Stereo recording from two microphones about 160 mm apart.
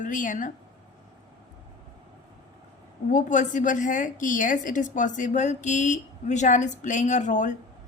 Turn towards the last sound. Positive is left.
turn(degrees=50)  # may be behind; listen again after turning